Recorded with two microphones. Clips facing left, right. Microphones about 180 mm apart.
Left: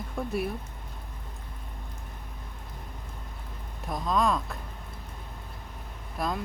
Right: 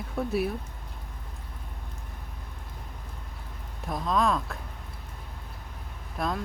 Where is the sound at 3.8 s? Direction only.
Centre (ahead or behind).